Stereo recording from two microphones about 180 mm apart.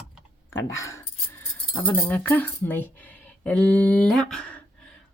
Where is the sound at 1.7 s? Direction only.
10° left (ahead or behind).